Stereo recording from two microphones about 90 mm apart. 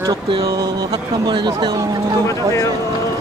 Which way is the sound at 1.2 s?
60° right (ahead or behind).